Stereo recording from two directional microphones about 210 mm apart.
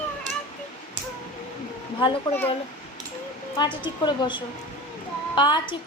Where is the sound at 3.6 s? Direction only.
20° left (ahead or behind).